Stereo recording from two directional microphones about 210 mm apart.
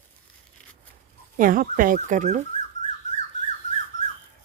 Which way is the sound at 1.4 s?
40° right (ahead or behind).